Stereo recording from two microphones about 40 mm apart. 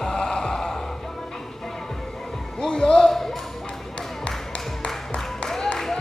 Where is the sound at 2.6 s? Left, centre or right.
Centre.